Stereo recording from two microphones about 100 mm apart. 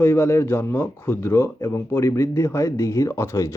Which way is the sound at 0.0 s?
25° left (ahead or behind).